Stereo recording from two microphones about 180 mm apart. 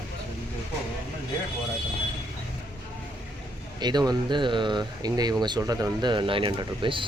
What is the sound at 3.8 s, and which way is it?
Speech, 20° right (ahead or behind).